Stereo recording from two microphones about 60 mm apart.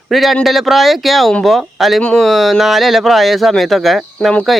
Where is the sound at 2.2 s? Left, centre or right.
Centre.